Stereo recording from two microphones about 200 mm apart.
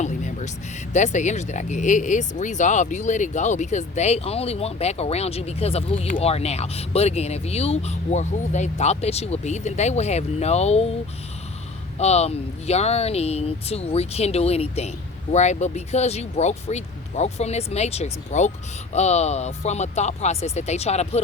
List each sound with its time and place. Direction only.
0.0 s a sound: 35° left (ahead or behind)
0.9 s speech: 35° left (ahead or behind)
11.9 s speech: 35° left (ahead or behind)